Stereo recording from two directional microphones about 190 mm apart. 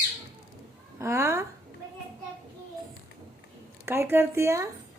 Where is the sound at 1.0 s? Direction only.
15° right (ahead or behind).